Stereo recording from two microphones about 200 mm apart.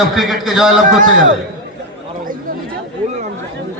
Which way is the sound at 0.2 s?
Centre (ahead or behind).